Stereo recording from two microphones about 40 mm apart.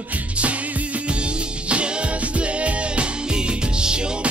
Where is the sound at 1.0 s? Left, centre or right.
Right.